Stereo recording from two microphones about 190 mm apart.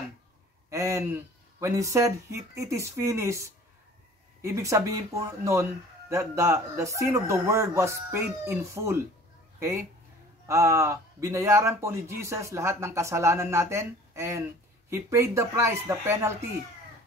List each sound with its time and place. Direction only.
0.7 s speech: 15° right (ahead or behind)